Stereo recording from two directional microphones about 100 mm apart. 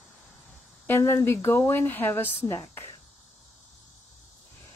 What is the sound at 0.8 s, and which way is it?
Speech, 25° left (ahead or behind).